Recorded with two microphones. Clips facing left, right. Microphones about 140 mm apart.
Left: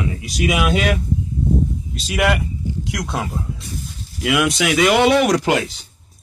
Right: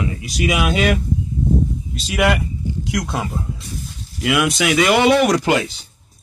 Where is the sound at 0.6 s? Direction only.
45° right (ahead or behind).